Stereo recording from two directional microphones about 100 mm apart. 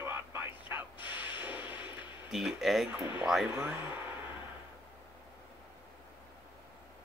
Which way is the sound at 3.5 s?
15° right (ahead or behind).